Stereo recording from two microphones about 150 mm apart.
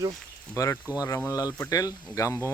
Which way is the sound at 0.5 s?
20° left (ahead or behind).